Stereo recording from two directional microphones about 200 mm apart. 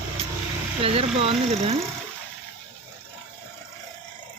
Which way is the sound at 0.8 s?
30° right (ahead or behind).